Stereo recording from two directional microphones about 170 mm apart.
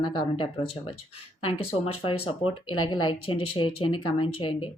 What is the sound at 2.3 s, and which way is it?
Speech, 30° left (ahead or behind).